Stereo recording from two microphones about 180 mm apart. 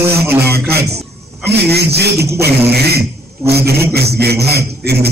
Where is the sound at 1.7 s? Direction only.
65° right (ahead or behind).